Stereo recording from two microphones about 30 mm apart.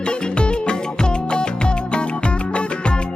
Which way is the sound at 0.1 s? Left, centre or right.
Left.